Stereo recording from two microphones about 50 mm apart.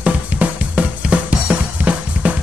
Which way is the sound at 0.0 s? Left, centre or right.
Right.